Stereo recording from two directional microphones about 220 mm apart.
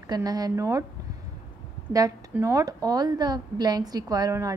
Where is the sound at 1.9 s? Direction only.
15° right (ahead or behind).